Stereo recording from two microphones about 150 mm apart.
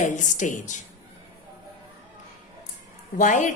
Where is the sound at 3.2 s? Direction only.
55° left (ahead or behind).